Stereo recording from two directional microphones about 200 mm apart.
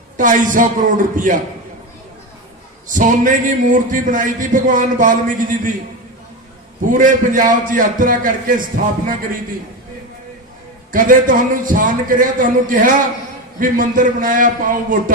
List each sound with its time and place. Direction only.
0.2 s a man's voice: 40° right (ahead or behind)
2.9 s a man's voice: 40° right (ahead or behind)
6.9 s a man's voice: 40° right (ahead or behind)
10.9 s a man's voice: 45° right (ahead or behind)